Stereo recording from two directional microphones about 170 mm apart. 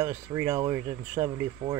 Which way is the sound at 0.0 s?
15° right (ahead or behind).